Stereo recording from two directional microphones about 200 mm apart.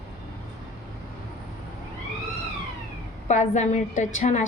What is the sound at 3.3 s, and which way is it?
A woman's voice, 35° left (ahead or behind).